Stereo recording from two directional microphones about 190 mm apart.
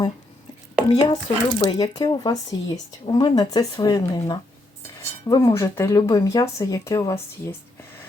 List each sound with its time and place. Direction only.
1.0 s speech: 20° left (ahead or behind)